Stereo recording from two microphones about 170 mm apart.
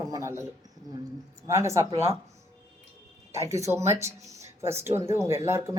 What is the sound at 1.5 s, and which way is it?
Speech, 15° right (ahead or behind).